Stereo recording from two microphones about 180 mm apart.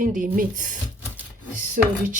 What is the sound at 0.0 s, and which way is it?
Speech, 50° right (ahead or behind).